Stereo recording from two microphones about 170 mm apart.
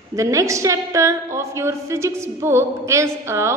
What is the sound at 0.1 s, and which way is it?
A woman's voice, 20° right (ahead or behind).